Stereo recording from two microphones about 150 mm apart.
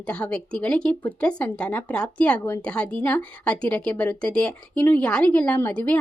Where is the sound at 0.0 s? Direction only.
5° left (ahead or behind).